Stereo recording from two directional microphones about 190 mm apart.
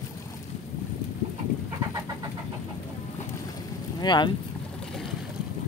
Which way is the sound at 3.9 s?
25° left (ahead or behind).